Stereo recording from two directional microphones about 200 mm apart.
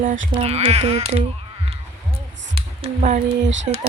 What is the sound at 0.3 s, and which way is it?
Speech, 30° right (ahead or behind).